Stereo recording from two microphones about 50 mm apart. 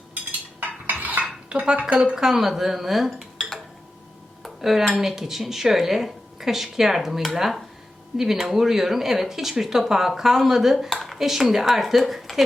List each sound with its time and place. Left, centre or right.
0.1 s cutlery: right
1.5 s speech: right
2.1 s speech: centre
4.4 s dishes: centre
7.3 s speech: centre
10.2 s dishes: centre
11.0 s speech: centre
11.6 s dishes: centre